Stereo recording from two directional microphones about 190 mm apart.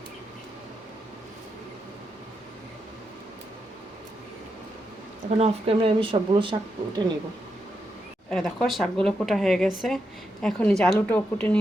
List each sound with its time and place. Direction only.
5.4 s speech: 30° right (ahead or behind)
8.3 s a woman's voice: centre (ahead or behind)